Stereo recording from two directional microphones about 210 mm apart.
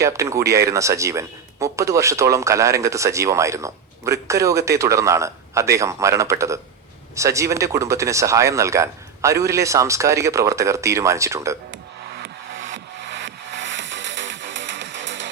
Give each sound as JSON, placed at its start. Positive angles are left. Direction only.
{"t": 0.0, "sound": "speech", "side_deg": -15}
{"t": 12.7, "sound": "music", "side_deg": -60}